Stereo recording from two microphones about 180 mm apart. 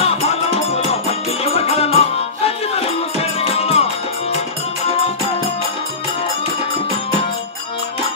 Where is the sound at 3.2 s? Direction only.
35° left (ahead or behind).